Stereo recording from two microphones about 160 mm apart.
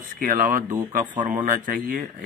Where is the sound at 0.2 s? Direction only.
55° right (ahead or behind).